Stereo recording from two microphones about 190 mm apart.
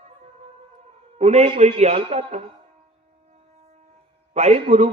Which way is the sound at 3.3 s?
35° right (ahead or behind).